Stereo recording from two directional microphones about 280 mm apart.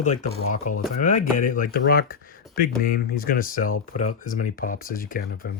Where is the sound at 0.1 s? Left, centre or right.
Left.